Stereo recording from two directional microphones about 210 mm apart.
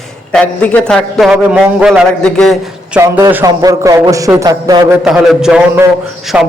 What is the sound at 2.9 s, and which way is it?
A man's voice, 10° right (ahead or behind).